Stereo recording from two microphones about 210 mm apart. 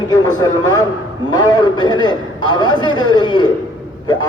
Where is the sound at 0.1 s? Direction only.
20° left (ahead or behind).